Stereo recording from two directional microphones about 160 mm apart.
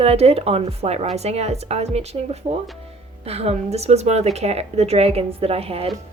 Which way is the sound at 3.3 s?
40° right (ahead or behind).